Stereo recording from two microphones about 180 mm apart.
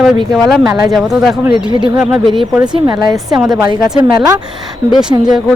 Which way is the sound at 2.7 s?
25° right (ahead or behind).